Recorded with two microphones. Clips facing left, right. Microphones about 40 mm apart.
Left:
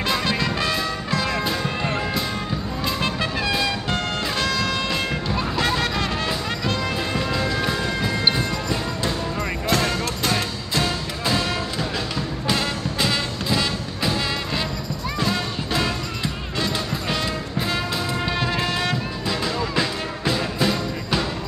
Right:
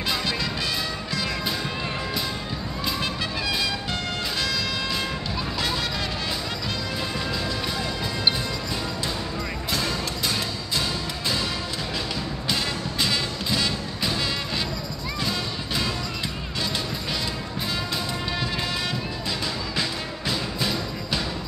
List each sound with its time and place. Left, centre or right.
0.1 s music: left
3.0 s music: left
7.2 s music: left
9.7 s music: left
12.4 s music: left
15.2 s music: left
19.2 s music: centre